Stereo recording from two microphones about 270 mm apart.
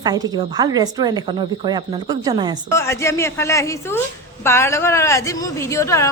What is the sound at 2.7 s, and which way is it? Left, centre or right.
Speech, centre.